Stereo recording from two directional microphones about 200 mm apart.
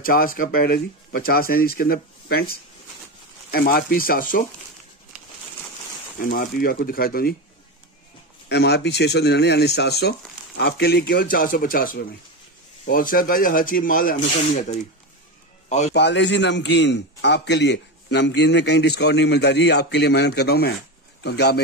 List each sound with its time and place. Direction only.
0.0 s speech: 45° left (ahead or behind)
3.5 s speech: 50° left (ahead or behind)
6.1 s speech: 45° left (ahead or behind)
8.5 s a man's voice: 55° left (ahead or behind); by 14.8 s 40° left (ahead or behind)
15.9 s a man's voice: 60° left (ahead or behind)